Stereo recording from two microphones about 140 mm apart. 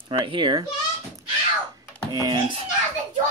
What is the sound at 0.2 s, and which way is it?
Speech, 35° right (ahead or behind).